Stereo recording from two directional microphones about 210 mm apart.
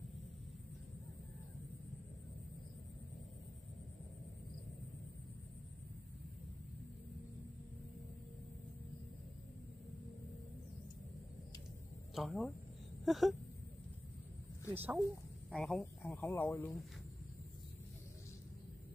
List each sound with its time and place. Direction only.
12.2 s speech: centre (ahead or behind)
14.7 s speech: 10° right (ahead or behind)
15.5 s speech: centre (ahead or behind)